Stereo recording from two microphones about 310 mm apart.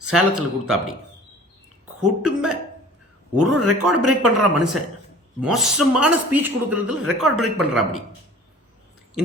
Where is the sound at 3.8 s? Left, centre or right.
Right.